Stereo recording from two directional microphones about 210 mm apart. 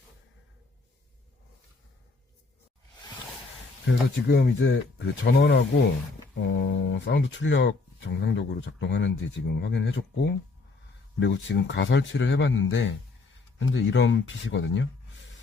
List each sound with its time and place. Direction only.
3.8 s speech: 50° left (ahead or behind)